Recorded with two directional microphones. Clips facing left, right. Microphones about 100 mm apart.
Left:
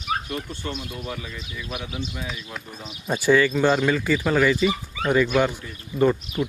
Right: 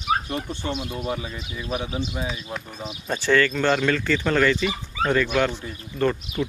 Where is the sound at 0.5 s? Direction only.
25° right (ahead or behind).